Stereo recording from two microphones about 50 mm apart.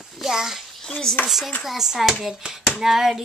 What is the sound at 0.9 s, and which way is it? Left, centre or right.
Speech, centre.